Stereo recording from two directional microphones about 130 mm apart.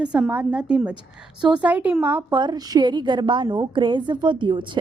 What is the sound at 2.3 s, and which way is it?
A woman's voice, 35° right (ahead or behind).